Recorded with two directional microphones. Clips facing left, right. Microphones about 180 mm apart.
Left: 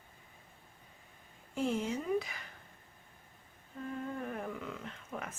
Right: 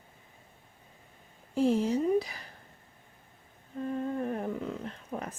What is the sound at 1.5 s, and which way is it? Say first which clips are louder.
Speech: right 8 dB; 35° right (ahead or behind).